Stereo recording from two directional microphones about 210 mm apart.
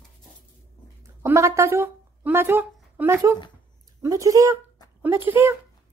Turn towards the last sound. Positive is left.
turn(degrees=-10)  # may be behind; listen again after turning